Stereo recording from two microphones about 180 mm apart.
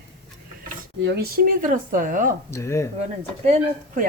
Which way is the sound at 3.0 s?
40° right (ahead or behind).